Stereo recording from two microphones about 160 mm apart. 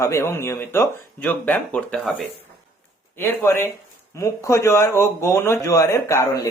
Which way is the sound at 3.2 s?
15° left (ahead or behind).